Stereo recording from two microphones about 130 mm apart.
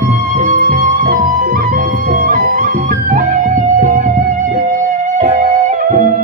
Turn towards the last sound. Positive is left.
turn(degrees=-85)